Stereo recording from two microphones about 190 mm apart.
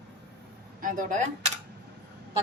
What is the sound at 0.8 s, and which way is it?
Speech, 45° right (ahead or behind).